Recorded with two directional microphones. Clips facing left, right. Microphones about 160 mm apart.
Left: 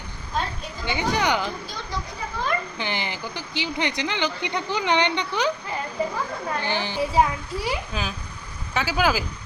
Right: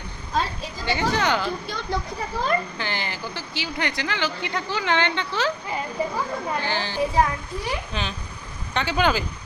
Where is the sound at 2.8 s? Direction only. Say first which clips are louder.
Left 1 dB; 15° left (ahead or behind).